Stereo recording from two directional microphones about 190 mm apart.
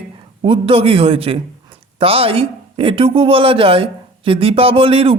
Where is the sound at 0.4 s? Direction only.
30° right (ahead or behind).